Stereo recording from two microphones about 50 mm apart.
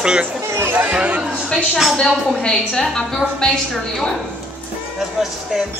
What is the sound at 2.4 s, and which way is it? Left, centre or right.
A woman's voice, centre.